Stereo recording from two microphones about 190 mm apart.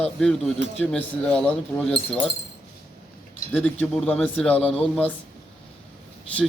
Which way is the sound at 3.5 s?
10° left (ahead or behind).